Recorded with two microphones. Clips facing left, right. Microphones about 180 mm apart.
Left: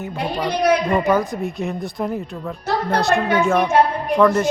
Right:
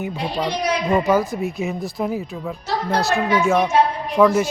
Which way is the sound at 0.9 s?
5° right (ahead or behind).